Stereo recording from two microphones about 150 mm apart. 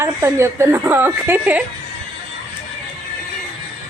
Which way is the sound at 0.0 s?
15° right (ahead or behind).